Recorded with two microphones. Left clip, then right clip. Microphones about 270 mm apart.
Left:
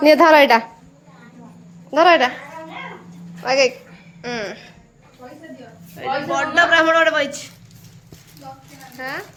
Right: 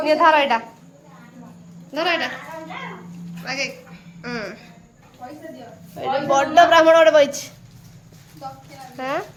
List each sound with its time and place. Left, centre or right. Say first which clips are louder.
0.0 s a woman's voice: left 5 dB; left
1.9 s speech: left 9 dB; centre
3.4 s speech: left 10 dB; centre
6.0 s a man's voice: right 2 dB; centre
9.0 s speech: right 3 dB; centre